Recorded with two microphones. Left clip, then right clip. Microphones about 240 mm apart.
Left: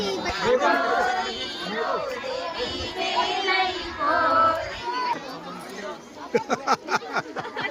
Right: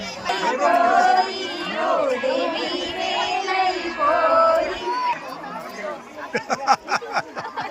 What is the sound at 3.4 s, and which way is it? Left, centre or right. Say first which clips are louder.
Child singing: even; right.